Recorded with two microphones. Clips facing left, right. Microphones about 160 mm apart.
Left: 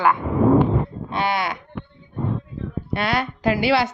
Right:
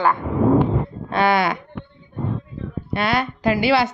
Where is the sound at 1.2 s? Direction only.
90° right.